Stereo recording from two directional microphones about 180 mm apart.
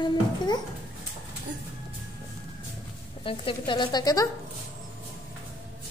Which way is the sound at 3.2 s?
30° left (ahead or behind).